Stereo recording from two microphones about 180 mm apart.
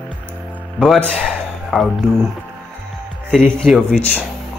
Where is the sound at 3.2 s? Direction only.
5° left (ahead or behind).